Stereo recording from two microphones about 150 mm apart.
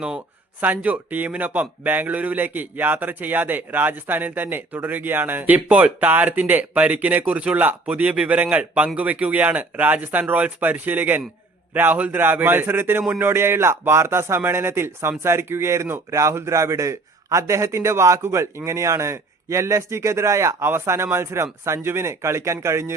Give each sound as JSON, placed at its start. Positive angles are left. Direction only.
{"t": 0.6, "sound": "speech", "side_deg": -10}